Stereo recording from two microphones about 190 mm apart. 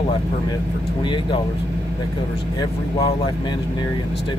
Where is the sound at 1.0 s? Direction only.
25° left (ahead or behind).